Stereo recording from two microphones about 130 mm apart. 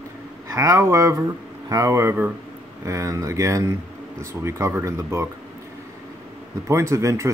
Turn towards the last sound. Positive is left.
turn(degrees=-25)  # may be behind; listen again after turning